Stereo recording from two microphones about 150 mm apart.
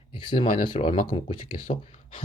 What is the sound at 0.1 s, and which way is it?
Speech, 35° left (ahead or behind).